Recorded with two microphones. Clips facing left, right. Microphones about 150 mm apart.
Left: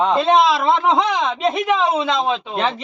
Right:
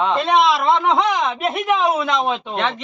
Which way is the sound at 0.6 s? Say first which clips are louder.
Even; centre (ahead or behind).